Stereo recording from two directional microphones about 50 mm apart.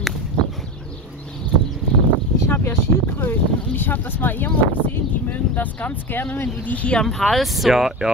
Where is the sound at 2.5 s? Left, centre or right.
Left.